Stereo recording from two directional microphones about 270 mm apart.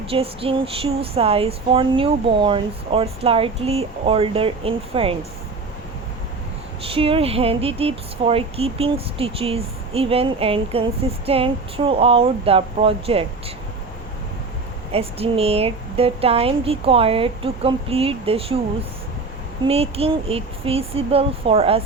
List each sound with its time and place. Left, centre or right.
0.1 s speech: right
6.8 s speech: right
14.9 s speech: right
19.6 s speech: right